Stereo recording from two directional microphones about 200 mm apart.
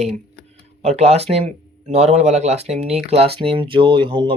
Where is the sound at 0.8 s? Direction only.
30° right (ahead or behind).